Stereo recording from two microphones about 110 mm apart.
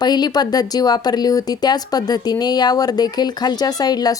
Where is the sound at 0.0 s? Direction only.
40° left (ahead or behind).